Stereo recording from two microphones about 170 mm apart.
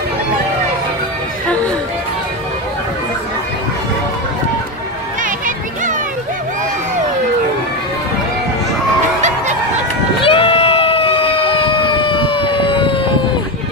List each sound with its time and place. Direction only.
10.2 s vehicle: 35° left (ahead or behind)